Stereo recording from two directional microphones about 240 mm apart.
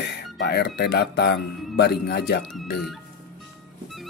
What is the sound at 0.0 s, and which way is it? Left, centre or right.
Speech, left.